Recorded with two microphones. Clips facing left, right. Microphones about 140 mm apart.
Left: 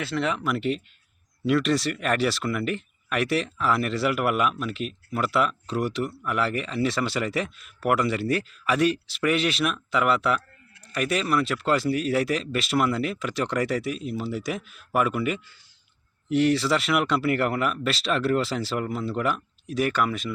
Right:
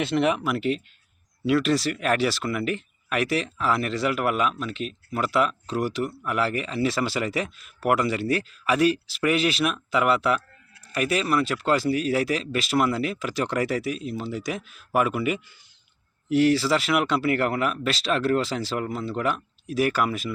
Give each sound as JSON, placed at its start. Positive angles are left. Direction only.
{"t": 0.0, "sound": "speech", "side_deg": -20}
{"t": 0.4, "sound": "speech", "side_deg": 0}